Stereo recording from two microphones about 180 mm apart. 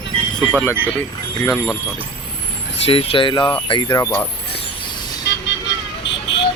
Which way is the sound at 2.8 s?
30° left (ahead or behind).